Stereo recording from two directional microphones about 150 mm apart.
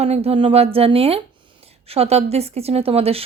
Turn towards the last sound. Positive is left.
turn(degrees=-40)  # may be behind; listen again after turning